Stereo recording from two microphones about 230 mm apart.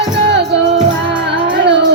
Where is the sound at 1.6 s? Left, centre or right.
Right.